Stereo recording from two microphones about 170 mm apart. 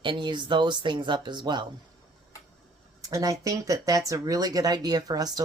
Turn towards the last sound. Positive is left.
turn(degrees=-20)  # may be behind; listen again after turning